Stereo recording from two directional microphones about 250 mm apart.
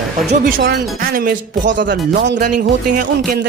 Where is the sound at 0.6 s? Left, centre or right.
Right.